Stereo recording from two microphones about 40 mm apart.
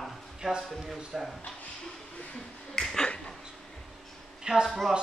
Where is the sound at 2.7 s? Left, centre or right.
Centre.